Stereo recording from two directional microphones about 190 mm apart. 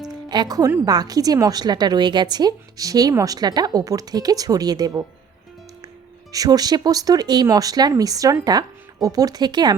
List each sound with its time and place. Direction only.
0.3 s a woman's voice: 20° right (ahead or behind)
6.3 s a woman's voice: 20° right (ahead or behind)